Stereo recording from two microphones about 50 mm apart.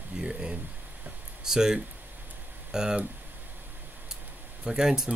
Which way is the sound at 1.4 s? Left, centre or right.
Centre.